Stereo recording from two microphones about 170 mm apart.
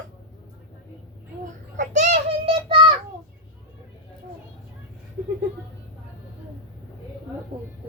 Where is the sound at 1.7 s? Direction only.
45° right (ahead or behind).